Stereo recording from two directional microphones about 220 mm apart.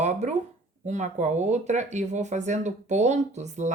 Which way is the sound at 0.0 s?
30° right (ahead or behind).